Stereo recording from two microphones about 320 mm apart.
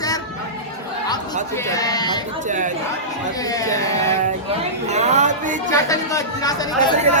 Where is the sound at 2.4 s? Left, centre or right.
Right.